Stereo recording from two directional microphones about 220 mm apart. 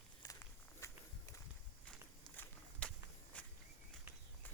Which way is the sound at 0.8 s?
15° left (ahead or behind).